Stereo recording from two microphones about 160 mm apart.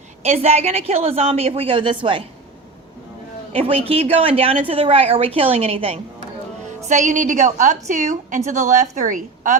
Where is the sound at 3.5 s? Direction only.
35° right (ahead or behind).